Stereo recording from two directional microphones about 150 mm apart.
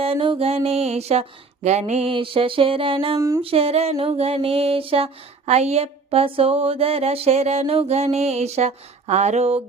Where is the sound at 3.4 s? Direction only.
40° right (ahead or behind).